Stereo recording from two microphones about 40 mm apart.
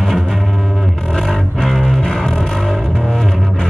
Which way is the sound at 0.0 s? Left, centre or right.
Centre.